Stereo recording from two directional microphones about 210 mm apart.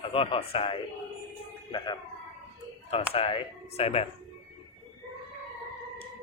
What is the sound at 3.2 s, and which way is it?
Speech, 30° left (ahead or behind).